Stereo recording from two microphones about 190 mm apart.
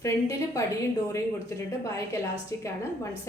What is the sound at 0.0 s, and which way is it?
A woman's voice, 15° left (ahead or behind).